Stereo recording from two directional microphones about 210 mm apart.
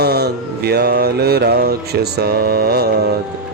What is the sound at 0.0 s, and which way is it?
Mantra, 50° right (ahead or behind).